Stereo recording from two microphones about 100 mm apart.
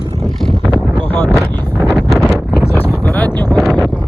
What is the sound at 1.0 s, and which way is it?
Wind noise, 20° left (ahead or behind).